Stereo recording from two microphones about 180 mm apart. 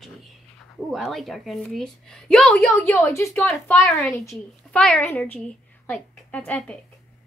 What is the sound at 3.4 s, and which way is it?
A woman's voice, centre (ahead or behind).